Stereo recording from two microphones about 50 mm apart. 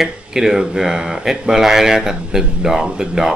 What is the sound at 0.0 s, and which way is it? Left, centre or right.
Speech, centre.